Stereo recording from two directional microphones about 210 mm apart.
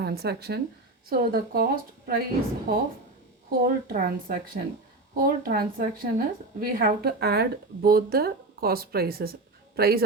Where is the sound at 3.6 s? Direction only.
45° right (ahead or behind).